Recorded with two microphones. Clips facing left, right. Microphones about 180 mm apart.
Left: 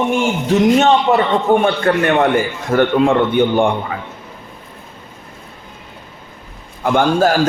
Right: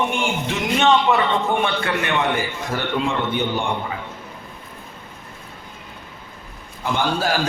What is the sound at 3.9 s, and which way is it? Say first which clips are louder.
Speech: left 4 dB; 60° left (ahead or behind).